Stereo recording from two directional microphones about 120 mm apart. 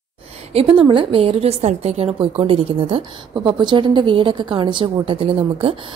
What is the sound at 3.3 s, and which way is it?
A woman's voice, 40° right (ahead or behind).